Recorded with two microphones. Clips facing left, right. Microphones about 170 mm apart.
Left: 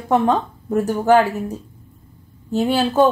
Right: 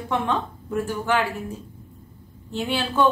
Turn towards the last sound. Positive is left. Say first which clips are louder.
# left 7 dB
turn(degrees=40)  # may be behind; listen again after turning